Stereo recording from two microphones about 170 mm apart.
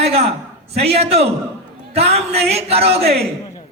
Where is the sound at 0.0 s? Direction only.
35° right (ahead or behind).